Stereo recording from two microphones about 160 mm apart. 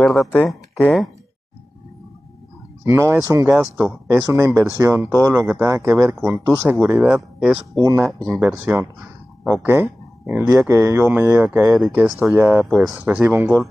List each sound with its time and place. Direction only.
0.0 s speech: 5° left (ahead or behind)
2.8 s speech: 15° right (ahead or behind)
7.7 s speech: 20° right (ahead or behind)
8.4 s speech: 10° right (ahead or behind)
10.7 s speech: 20° right (ahead or behind)